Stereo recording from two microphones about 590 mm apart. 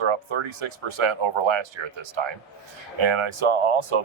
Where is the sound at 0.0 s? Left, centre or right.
Right.